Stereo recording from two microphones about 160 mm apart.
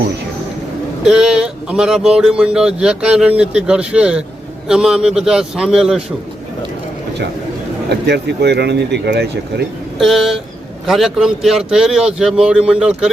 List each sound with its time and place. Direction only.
1.0 s a man's voice: 5° right (ahead or behind)
7.9 s speech: 90° right
10.0 s a man's voice: centre (ahead or behind)